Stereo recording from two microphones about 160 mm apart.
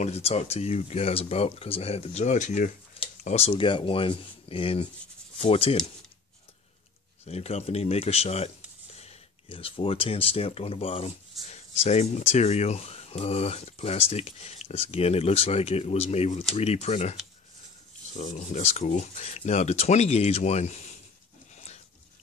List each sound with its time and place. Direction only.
0.0 s speech: 40° left (ahead or behind)
7.2 s speech: 40° left (ahead or behind)